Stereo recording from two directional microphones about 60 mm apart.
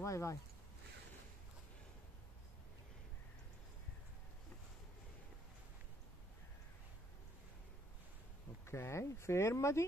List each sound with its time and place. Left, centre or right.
0.0 s speech: left
8.6 s speech: left